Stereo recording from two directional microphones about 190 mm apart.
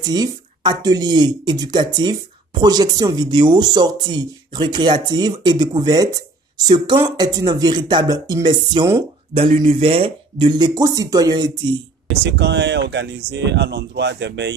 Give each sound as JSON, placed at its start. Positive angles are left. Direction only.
{"t": 0.0, "sound": "speech", "side_deg": -20}
{"t": 9.3, "sound": "speech", "side_deg": -30}
{"t": 12.1, "sound": "speech", "side_deg": -65}